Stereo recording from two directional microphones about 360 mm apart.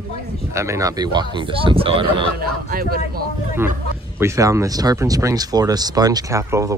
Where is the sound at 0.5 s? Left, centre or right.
Centre.